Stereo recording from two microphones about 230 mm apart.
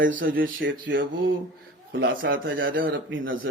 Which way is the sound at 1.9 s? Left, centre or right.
Right.